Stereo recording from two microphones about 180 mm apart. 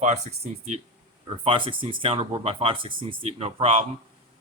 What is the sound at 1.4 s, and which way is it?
A man's voice, 30° right (ahead or behind).